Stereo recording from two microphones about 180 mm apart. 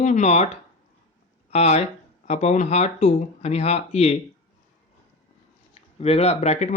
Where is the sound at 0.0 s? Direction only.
40° left (ahead or behind).